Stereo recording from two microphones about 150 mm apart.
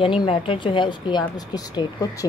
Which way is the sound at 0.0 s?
35° left (ahead or behind).